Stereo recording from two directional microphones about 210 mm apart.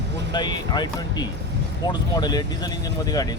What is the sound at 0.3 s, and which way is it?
Speech, 20° left (ahead or behind).